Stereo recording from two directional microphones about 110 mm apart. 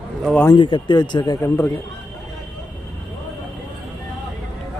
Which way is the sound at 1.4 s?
20° left (ahead or behind).